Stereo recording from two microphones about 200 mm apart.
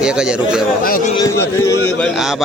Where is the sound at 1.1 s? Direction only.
15° left (ahead or behind).